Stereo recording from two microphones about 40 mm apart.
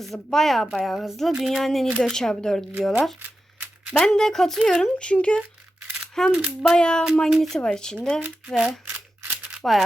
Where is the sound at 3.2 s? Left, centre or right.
Right.